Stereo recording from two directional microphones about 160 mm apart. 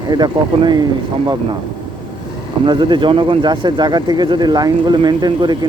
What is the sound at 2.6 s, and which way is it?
A man's voice, 30° right (ahead or behind).